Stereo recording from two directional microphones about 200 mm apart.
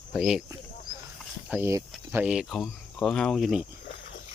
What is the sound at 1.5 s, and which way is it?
Speech, 10° right (ahead or behind).